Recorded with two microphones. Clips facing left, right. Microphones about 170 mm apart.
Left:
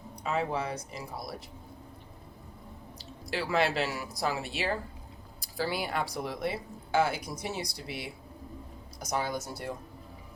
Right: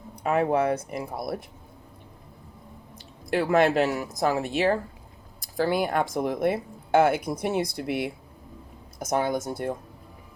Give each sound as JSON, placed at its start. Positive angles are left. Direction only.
{"t": 0.2, "sound": "speech", "side_deg": -55}
{"t": 3.0, "sound": "speech", "side_deg": -50}